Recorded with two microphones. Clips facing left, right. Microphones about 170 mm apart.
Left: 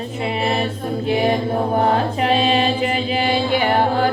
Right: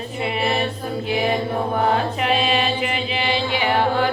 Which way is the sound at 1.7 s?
35° left (ahead or behind).